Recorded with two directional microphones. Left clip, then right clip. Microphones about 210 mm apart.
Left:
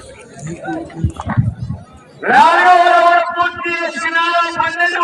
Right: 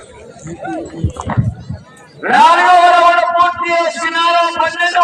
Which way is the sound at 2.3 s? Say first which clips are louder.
Right 1 dB; 50° right (ahead or behind).